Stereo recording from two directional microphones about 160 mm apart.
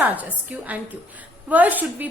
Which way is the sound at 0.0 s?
10° right (ahead or behind).